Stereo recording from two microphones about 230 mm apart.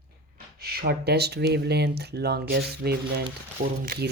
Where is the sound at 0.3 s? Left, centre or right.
Right.